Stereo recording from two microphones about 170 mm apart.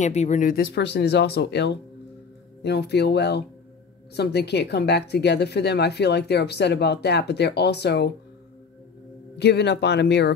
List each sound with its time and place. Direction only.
0.0 s speech: 40° left (ahead or behind); by 8.1 s 80° left
9.4 s speech: 80° left